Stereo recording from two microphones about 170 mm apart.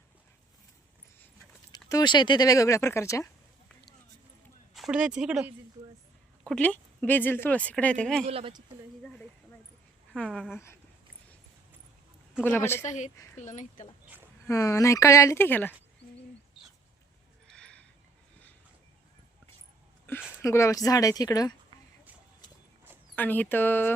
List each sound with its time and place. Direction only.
1.7 s speech: 20° left (ahead or behind)
4.7 s speech: 5° right (ahead or behind)
6.5 s speech: 10° left (ahead or behind)
8.3 s speech: 30° right (ahead or behind)
10.2 s speech: centre (ahead or behind)
12.4 s speech: 10° left (ahead or behind)
12.8 s speech: 45° left (ahead or behind)
14.4 s speech: 15° left (ahead or behind)
17.5 s a sound: 5° left (ahead or behind)
20.4 s speech: 15° left (ahead or behind)
23.1 s speech: 10° left (ahead or behind)